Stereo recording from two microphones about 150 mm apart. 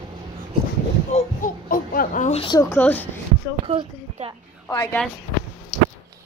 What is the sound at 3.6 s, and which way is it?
Speech, 40° right (ahead or behind).